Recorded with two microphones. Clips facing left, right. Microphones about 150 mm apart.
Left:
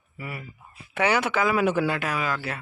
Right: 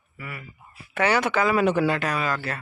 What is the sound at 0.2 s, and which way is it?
Speech, 30° left (ahead or behind).